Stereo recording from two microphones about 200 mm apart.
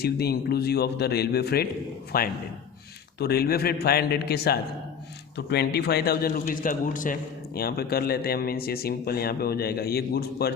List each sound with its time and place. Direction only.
0.0 s a man's voice: 50° left (ahead or behind)